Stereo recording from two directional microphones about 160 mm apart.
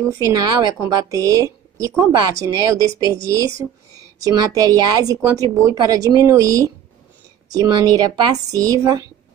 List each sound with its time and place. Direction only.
0.1 s a woman's voice: 20° right (ahead or behind)